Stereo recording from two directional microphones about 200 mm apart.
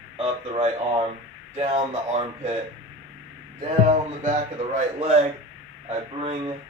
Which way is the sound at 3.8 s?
35° right (ahead or behind).